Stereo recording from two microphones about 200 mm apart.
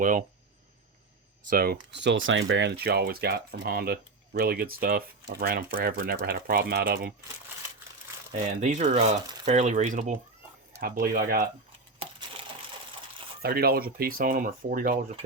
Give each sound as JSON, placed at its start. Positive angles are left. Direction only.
{"t": 0.0, "sound": "speech", "side_deg": -40}
{"t": 1.5, "sound": "speech", "side_deg": -50}
{"t": 8.6, "sound": "speech", "side_deg": -35}
{"t": 11.9, "sound": "crushing", "side_deg": -25}
{"t": 13.4, "sound": "speech", "side_deg": -50}